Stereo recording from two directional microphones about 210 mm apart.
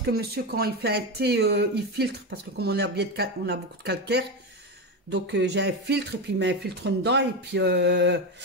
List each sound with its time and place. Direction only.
0.0 s speech: 45° right (ahead or behind)